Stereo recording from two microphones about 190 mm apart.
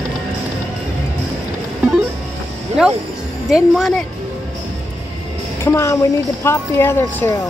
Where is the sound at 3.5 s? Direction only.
Centre (ahead or behind).